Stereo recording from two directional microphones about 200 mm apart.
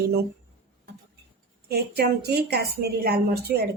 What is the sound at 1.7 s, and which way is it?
A woman's voice, 50° right (ahead or behind).